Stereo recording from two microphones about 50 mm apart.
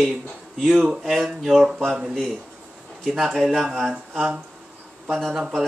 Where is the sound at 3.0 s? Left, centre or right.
Centre.